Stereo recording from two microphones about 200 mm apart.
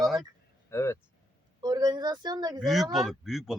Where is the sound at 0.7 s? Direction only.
15° left (ahead or behind).